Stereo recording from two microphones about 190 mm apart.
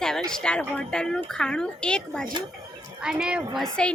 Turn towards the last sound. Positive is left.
turn(degrees=5)  # may be behind; listen again after turning